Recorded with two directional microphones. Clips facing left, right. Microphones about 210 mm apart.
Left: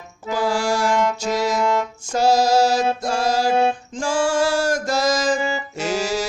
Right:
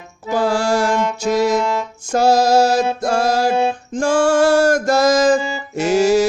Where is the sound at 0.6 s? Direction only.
55° right (ahead or behind).